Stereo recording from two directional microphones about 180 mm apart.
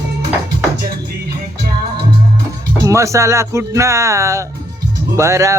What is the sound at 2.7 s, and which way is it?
Speech, 15° right (ahead or behind).